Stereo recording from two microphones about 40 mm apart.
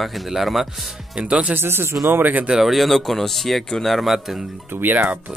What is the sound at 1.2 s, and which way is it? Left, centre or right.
Speech, right.